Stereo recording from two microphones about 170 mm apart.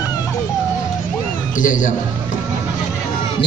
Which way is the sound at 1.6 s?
50° left (ahead or behind).